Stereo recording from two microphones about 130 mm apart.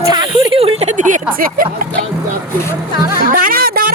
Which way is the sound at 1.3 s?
90° right.